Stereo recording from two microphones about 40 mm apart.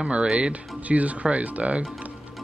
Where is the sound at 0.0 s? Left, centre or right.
Right.